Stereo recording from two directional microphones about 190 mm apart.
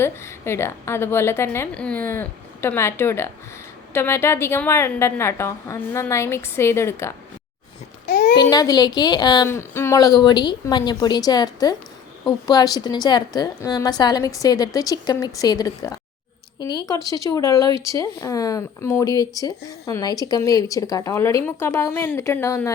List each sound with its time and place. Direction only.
0.0 s speech: 15° left (ahead or behind)
8.0 s a sound: 55° left (ahead or behind)
8.4 s a woman's voice: 20° left (ahead or behind)